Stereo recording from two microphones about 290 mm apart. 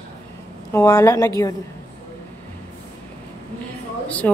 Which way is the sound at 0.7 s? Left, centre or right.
Centre.